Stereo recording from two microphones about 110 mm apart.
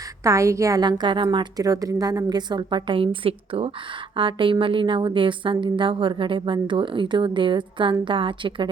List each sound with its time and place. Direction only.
0.3 s a woman's voice: 25° right (ahead or behind); by 8.7 s 50° right (ahead or behind)